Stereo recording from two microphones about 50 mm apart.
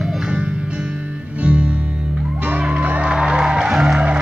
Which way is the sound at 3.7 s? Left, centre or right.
Centre.